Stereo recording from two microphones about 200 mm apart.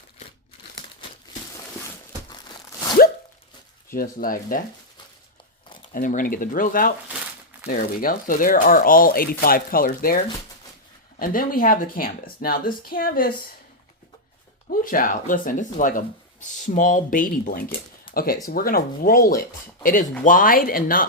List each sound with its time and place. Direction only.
3.8 s speech: 45° left (ahead or behind)
5.8 s speech: 40° left (ahead or behind)
11.2 s speech: 45° left (ahead or behind)
14.7 s speech: 45° left (ahead or behind)